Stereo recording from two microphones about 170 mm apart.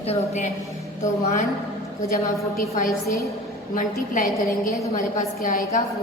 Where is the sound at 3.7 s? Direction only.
50° left (ahead or behind).